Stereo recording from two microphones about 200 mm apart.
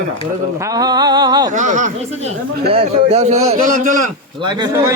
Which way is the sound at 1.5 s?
40° right (ahead or behind).